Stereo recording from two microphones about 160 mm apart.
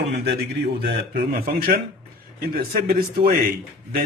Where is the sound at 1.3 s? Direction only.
65° right (ahead or behind).